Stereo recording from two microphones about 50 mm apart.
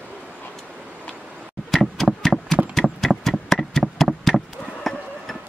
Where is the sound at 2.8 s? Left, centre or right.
Centre.